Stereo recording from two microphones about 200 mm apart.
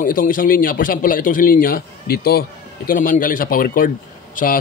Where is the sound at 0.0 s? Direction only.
45° left (ahead or behind).